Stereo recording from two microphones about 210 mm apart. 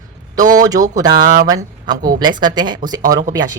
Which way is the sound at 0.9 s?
20° right (ahead or behind).